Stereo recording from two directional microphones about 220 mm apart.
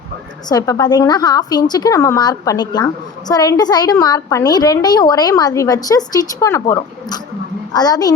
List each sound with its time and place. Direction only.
0.4 s a woman's voice: 15° left (ahead or behind)